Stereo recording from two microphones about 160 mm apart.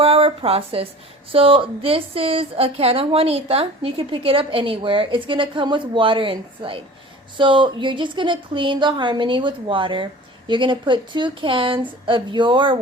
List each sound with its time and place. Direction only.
0.0 s a woman's voice: 35° right (ahead or behind)